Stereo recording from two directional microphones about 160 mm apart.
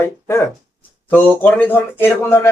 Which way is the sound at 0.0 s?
15° left (ahead or behind).